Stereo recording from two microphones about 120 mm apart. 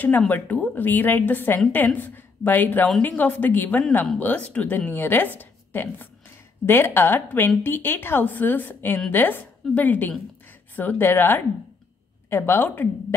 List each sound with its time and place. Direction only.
0.3 s a woman's voice: 15° left (ahead or behind)